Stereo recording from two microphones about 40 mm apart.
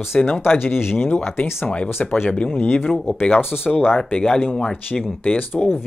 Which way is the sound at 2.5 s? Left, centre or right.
Left.